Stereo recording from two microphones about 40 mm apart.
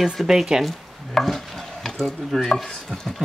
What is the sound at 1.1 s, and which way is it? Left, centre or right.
Stir, centre.